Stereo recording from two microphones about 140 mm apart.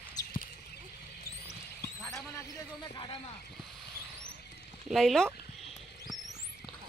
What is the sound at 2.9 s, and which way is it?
Speech, 30° left (ahead or behind).